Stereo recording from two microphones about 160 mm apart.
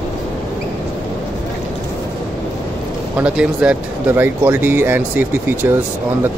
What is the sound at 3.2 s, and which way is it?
Speech, 5° right (ahead or behind).